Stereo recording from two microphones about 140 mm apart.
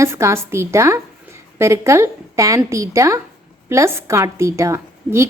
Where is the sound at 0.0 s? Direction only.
20° right (ahead or behind).